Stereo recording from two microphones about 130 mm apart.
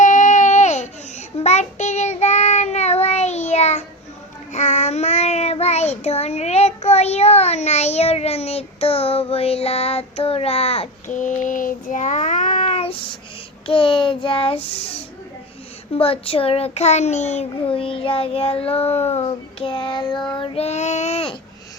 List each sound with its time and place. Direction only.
0.0 s baby cry: 70° left (ahead or behind)
1.5 s child singing: 60° left (ahead or behind)
11.1 s child singing: 75° left (ahead or behind); by 17.4 s 60° left (ahead or behind)
17.7 s child singing: 45° left (ahead or behind)